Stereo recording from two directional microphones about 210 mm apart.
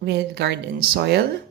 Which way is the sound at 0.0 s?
50° right (ahead or behind).